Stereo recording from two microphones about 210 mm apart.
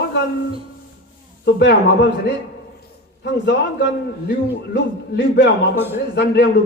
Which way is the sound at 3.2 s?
55° left (ahead or behind).